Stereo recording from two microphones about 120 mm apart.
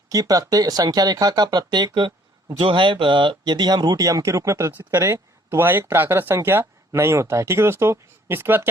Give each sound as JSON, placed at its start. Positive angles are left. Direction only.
{"t": 0.1, "sound": "speech", "side_deg": -30}